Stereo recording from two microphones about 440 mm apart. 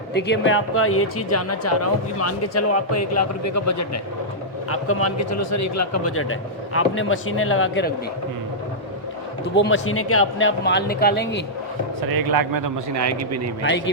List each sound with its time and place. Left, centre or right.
0.1 s speech: left
9.6 s speech: left
12.0 s a man's voice: right
13.6 s speech: left